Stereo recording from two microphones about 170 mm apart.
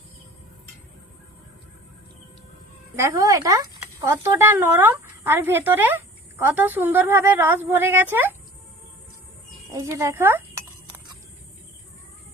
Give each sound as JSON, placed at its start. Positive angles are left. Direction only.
{"t": 2.9, "sound": "speech", "side_deg": -15}
{"t": 9.7, "sound": "speech", "side_deg": -20}